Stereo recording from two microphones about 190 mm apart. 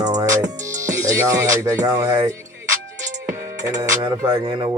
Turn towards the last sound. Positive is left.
turn(degrees=-15)  # may be behind; listen again after turning